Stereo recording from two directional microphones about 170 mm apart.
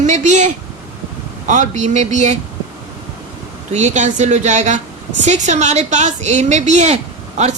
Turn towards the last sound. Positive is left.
turn(degrees=-40)  # may be behind; listen again after turning